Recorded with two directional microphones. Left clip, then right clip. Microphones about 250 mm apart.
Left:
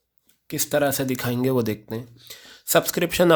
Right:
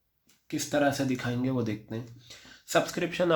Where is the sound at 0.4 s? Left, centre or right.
Left.